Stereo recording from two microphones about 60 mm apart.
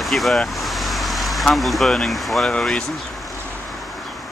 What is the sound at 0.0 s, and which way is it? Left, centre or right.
Speech, centre.